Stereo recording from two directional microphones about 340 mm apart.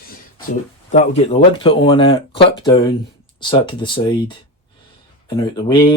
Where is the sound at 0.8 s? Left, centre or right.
Centre.